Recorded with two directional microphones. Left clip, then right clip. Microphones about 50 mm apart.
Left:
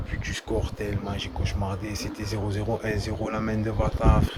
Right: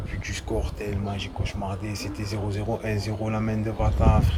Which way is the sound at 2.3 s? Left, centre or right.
Left.